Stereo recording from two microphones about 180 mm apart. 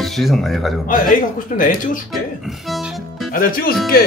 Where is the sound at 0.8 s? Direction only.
50° left (ahead or behind).